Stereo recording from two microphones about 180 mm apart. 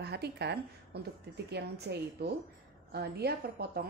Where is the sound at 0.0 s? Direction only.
65° right (ahead or behind).